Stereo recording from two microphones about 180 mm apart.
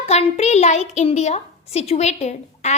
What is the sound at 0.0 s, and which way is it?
A child's voice, 35° left (ahead or behind).